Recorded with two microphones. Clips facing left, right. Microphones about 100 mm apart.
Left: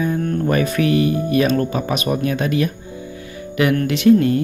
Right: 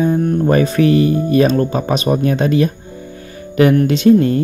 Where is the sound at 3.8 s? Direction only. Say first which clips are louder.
Right 2 dB; 30° right (ahead or behind).